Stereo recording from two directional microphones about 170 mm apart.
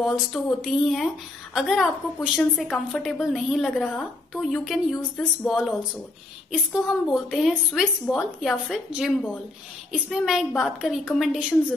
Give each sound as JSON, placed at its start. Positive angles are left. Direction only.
{"t": 0.0, "sound": "a woman's voice", "side_deg": 0}